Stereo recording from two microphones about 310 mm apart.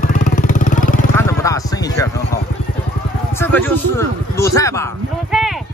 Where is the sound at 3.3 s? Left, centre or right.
Centre.